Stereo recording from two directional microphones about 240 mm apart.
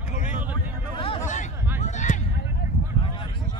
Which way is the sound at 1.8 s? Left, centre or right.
Left.